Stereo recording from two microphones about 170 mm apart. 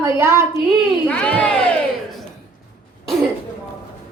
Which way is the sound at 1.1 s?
5° left (ahead or behind).